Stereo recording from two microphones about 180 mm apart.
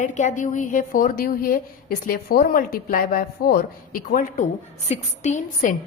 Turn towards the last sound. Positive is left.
turn(degrees=45)  # may be behind; listen again after turning